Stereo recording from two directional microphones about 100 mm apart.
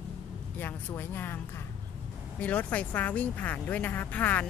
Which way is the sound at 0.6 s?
20° left (ahead or behind).